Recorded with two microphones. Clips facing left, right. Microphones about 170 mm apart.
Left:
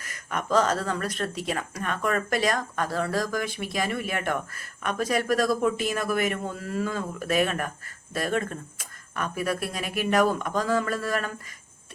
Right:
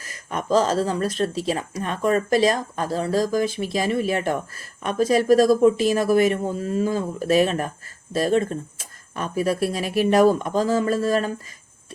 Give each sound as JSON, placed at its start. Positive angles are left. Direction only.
{"t": 0.0, "sound": "speech", "side_deg": -25}
{"t": 5.8, "sound": "speech", "side_deg": -35}
{"t": 6.5, "sound": "speech", "side_deg": -20}
{"t": 7.2, "sound": "speech", "side_deg": -35}